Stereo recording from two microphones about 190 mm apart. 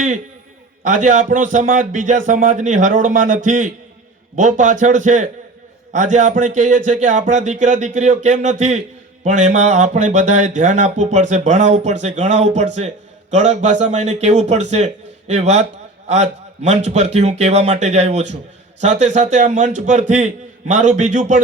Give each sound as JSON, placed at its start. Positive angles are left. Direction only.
{"t": 0.9, "sound": "speech", "side_deg": -40}